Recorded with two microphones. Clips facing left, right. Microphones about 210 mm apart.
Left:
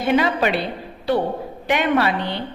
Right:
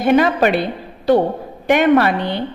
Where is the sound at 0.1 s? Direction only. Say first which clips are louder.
Right 5 dB; 50° right (ahead or behind).